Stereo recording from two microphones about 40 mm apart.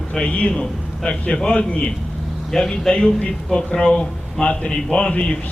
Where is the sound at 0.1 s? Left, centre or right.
Left.